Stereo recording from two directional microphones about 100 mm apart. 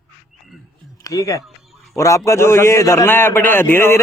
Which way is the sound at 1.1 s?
35° left (ahead or behind).